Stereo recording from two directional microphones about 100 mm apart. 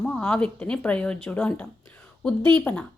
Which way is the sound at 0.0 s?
10° left (ahead or behind).